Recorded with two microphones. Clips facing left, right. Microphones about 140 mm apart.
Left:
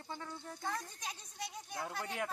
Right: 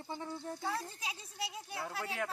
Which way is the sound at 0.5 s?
5° right (ahead or behind).